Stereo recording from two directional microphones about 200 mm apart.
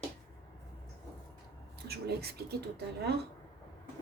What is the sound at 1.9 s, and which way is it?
Speech, 55° right (ahead or behind).